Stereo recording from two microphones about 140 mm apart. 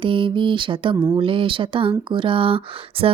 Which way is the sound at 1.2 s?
40° right (ahead or behind).